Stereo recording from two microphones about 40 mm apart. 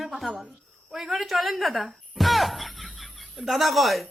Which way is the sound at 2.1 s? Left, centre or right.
Centre.